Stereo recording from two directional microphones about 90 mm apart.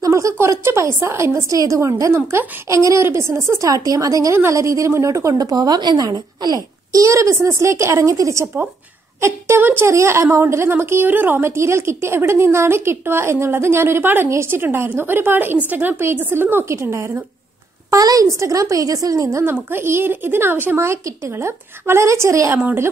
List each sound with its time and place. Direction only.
0.0 s a sound: 35° right (ahead or behind)
1.0 s a woman's voice: 30° right (ahead or behind)
19.4 s a woman's voice: 25° right (ahead or behind)